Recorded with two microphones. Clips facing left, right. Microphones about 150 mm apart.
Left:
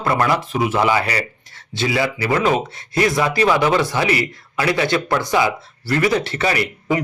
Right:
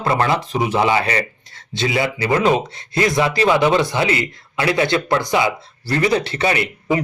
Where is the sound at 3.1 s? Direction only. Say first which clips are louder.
Right 2 dB; 25° right (ahead or behind).